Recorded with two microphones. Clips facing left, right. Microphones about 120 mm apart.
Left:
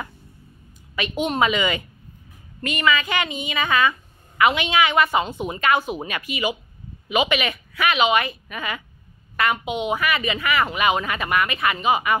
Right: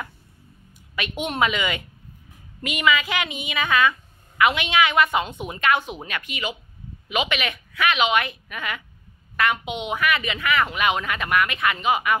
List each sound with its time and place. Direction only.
0.9 s a woman's voice: centre (ahead or behind)